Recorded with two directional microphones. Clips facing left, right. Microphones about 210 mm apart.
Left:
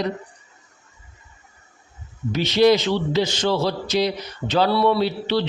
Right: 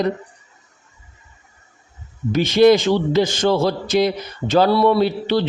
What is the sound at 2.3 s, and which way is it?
A man's voice, 50° right (ahead or behind).